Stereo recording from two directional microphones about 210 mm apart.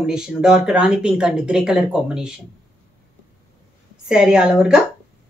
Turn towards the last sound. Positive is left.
turn(degrees=-5)  # may be behind; listen again after turning